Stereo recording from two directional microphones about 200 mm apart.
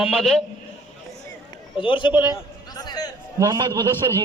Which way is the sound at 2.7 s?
20° left (ahead or behind).